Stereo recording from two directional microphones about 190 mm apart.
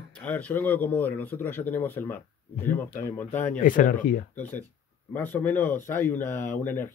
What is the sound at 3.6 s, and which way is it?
Speech, 45° left (ahead or behind).